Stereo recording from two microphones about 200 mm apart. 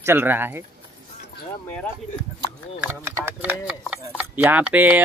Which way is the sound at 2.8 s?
10° right (ahead or behind).